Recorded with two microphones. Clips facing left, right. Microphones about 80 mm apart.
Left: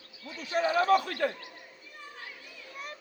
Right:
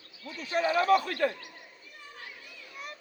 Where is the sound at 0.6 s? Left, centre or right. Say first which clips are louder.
Even; left.